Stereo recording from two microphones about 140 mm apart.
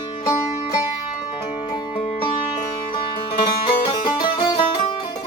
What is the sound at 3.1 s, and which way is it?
Music, 40° left (ahead or behind).